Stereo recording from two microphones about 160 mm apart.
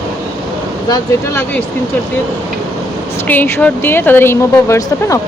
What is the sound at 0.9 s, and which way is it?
Speech, 20° left (ahead or behind).